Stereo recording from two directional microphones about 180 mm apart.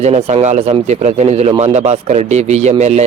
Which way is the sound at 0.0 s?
35° right (ahead or behind).